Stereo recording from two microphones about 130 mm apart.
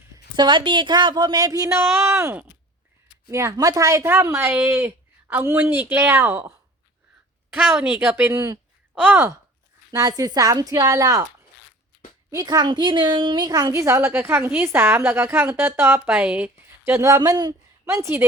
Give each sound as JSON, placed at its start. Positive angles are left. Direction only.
{"t": 0.3, "sound": "a woman's voice", "side_deg": -35}
{"t": 7.8, "sound": "speech", "side_deg": -15}
{"t": 9.9, "sound": "a woman's voice", "side_deg": -30}
{"t": 12.3, "sound": "a woman's voice", "side_deg": -30}